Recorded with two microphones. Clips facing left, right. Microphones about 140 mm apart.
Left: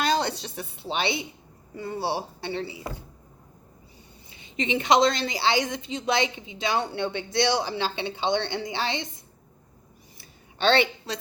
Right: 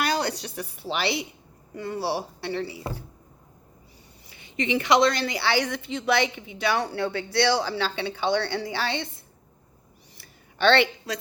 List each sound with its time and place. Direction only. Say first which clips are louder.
0.0 s a woman's voice: left 1 dB; 25° left (ahead or behind)
4.3 s a woman's voice: right 1 dB; 25° left (ahead or behind)